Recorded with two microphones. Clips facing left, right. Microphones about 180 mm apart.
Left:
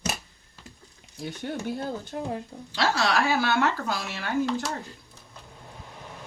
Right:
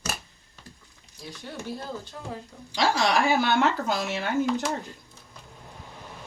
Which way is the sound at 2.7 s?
15° right (ahead or behind).